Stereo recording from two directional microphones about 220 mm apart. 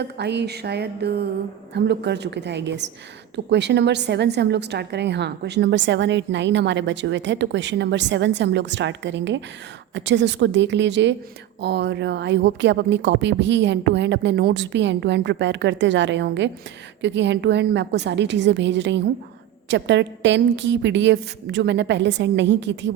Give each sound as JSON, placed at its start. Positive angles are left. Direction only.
{"t": 0.0, "sound": "a woman's voice", "side_deg": -50}